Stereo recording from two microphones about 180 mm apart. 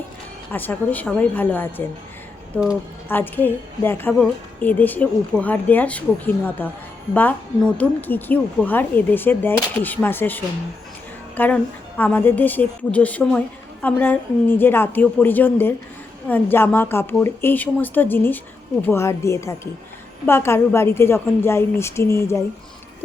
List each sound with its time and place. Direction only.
0.5 s a woman's voice: 10° left (ahead or behind)
3.1 s a woman's voice: 10° left (ahead or behind)